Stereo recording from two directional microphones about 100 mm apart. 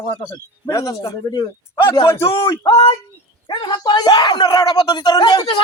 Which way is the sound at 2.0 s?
25° left (ahead or behind).